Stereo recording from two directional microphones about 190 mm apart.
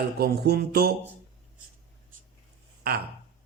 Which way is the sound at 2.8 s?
55° right (ahead or behind).